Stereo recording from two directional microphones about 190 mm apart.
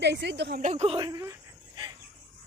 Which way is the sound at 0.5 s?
35° right (ahead or behind).